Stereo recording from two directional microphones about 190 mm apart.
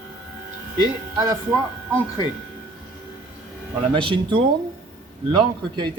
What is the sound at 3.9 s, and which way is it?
Speech, 25° right (ahead or behind).